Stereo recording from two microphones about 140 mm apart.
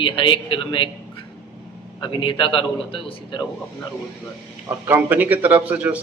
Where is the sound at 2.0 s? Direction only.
35° left (ahead or behind).